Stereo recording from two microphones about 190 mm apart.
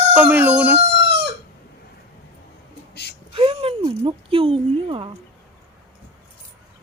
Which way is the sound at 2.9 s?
60° left (ahead or behind).